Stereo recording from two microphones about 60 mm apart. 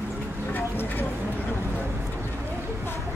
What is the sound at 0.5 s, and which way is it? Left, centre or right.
Vehicle, left.